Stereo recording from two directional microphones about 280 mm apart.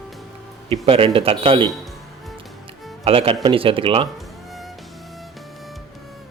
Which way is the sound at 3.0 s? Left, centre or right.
Centre.